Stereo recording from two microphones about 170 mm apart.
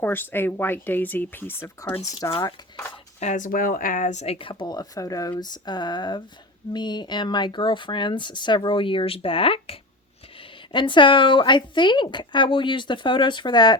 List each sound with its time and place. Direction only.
0.0 s speech: 10° left (ahead or behind)
2.3 s speech: 30° left (ahead or behind)
3.2 s speech: 45° left (ahead or behind); by 13.7 s 25° left (ahead or behind)